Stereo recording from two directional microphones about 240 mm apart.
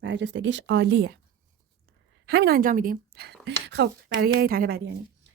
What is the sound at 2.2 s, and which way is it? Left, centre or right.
Speech, right.